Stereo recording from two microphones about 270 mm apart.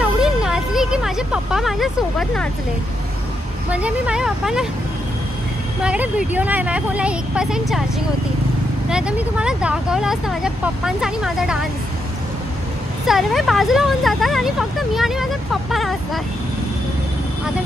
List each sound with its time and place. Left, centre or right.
0.0 s a sound: centre
3.7 s speech: centre
5.8 s speech: centre
8.9 s speech: centre
13.0 s speech: centre